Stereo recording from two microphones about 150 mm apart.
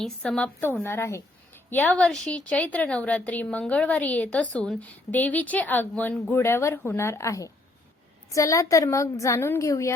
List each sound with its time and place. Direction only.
0.0 s a woman's voice: 5° left (ahead or behind)